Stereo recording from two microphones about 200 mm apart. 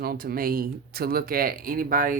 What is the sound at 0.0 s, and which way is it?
Speech, 50° right (ahead or behind).